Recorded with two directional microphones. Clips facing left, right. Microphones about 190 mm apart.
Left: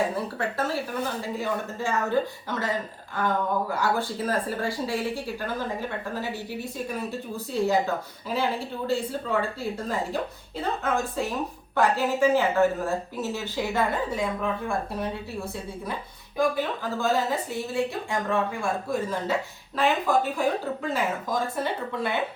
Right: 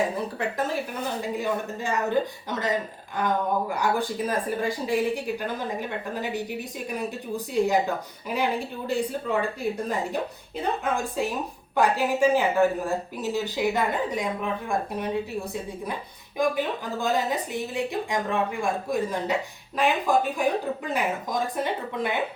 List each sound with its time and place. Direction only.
0.3 s speech: 15° right (ahead or behind)
16.4 s speech: 15° right (ahead or behind)